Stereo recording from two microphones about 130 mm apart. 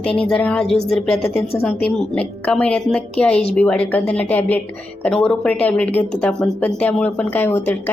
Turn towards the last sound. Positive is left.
turn(degrees=15)  # may be behind; listen again after turning